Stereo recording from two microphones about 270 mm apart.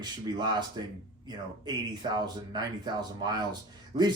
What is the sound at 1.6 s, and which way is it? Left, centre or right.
Speech, centre.